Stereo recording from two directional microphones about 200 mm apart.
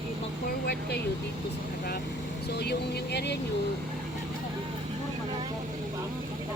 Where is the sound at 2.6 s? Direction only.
55° left (ahead or behind).